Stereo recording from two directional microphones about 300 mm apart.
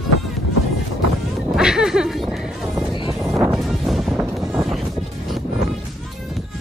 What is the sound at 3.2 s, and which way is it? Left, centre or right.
Music, centre.